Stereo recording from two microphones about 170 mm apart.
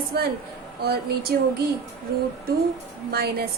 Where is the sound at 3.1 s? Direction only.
65° right (ahead or behind).